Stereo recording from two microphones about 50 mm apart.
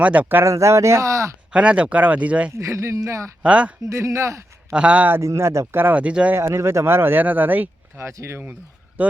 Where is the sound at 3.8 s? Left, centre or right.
Right.